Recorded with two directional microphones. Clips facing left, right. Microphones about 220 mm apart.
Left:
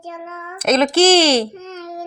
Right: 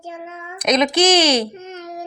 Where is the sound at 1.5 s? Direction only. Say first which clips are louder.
Left 1 dB; 15° right (ahead or behind).